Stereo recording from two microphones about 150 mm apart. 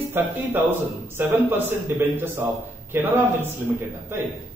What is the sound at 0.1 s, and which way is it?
A man's voice, 15° right (ahead or behind).